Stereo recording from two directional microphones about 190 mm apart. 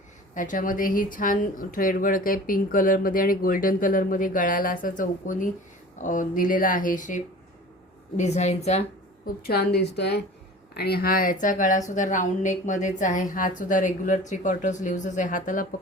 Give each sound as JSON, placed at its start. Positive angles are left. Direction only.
{"t": 0.3, "sound": "a woman's voice", "side_deg": 45}
{"t": 9.2, "sound": "a woman's voice", "side_deg": 55}